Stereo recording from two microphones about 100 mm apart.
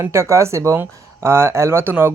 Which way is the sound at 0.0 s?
30° right (ahead or behind).